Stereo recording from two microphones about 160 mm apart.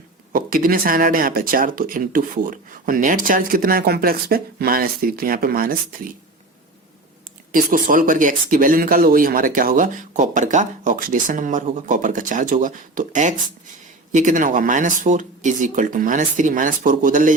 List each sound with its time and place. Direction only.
0.3 s speech: 60° right (ahead or behind)
7.5 s speech: 60° right (ahead or behind)